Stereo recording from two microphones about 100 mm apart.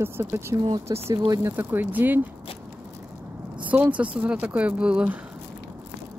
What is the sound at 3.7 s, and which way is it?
Speech, 15° right (ahead or behind).